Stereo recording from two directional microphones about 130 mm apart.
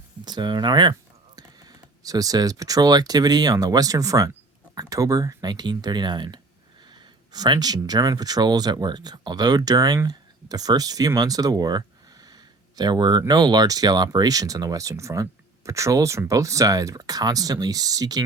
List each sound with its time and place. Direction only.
0.3 s speech: 35° right (ahead or behind)